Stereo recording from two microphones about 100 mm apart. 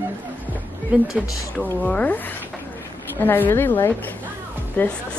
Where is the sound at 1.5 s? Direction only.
15° left (ahead or behind).